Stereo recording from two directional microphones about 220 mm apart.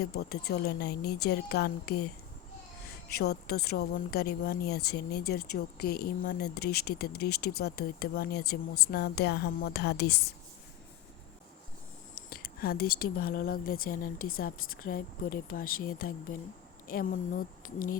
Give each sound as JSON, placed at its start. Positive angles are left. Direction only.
{"t": 0.0, "sound": "a woman's voice", "side_deg": 45}
{"t": 3.1, "sound": "a woman's voice", "side_deg": 45}
{"t": 12.1, "sound": "speech", "side_deg": 40}